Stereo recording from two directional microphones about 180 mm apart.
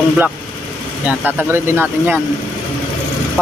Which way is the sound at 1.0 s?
10° right (ahead or behind).